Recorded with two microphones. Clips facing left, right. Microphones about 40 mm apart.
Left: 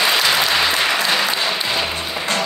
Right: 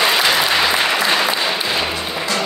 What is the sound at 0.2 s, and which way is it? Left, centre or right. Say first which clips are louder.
Applause: right 1 dB; centre.